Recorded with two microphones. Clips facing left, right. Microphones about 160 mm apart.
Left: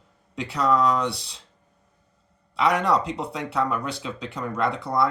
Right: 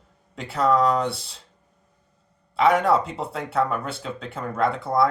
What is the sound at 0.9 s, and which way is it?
Speech, 50° right (ahead or behind).